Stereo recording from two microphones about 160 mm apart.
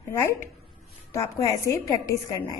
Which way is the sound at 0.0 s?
15° left (ahead or behind).